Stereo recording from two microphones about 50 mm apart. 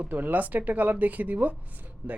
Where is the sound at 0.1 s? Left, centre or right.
Right.